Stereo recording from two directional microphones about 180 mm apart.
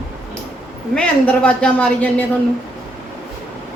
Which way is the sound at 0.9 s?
5° left (ahead or behind).